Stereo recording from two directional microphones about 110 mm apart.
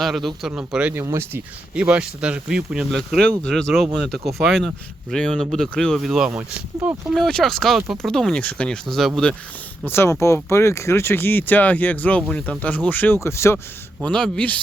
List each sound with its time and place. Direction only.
0.0 s speech: centre (ahead or behind)
0.9 s speech: 20° right (ahead or behind)
1.7 s speech: 10° right (ahead or behind)
2.9 s speech: 5° left (ahead or behind)
7.1 s speech: 5° left (ahead or behind)
9.8 s speech: 20° left (ahead or behind)
14.0 s speech: 10° left (ahead or behind)